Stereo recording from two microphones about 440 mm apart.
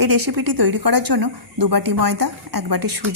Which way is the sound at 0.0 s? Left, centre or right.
Right.